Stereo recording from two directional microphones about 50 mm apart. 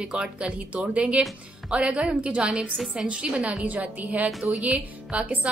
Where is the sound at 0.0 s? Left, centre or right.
Centre.